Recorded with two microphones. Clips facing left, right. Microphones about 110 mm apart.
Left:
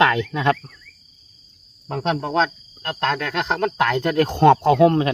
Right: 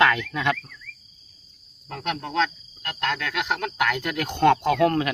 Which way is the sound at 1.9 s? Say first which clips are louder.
Left 7 dB; 35° left (ahead or behind).